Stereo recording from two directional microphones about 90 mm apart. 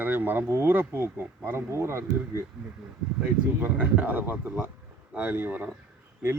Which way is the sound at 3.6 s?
20° right (ahead or behind).